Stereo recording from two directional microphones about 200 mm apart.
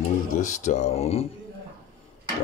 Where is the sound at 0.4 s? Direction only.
35° left (ahead or behind).